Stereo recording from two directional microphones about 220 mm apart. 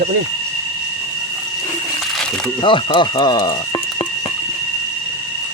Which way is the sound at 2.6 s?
20° left (ahead or behind).